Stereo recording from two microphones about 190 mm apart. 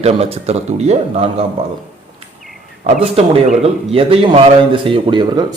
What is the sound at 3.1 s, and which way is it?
Speech, 30° right (ahead or behind).